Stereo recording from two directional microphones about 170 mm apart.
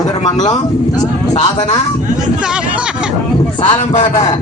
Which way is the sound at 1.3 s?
45° left (ahead or behind).